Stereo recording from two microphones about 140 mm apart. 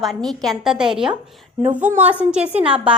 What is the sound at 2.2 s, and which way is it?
Speech, 10° right (ahead or behind).